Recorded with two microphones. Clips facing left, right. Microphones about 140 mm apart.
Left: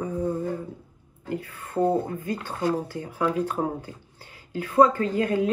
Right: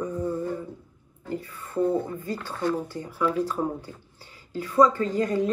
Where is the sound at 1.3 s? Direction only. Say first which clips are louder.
Left 1 dB; 50° left (ahead or behind).